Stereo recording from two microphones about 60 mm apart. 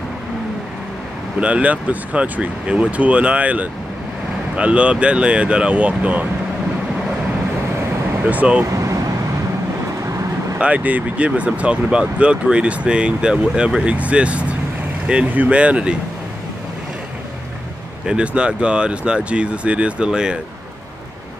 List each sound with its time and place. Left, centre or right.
1.4 s speech: right
8.3 s speech: right
8.7 s vehicle: right
10.6 s speech: right
18.0 s speech: centre